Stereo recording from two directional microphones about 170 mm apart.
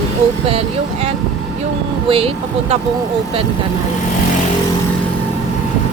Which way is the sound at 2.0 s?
35° right (ahead or behind).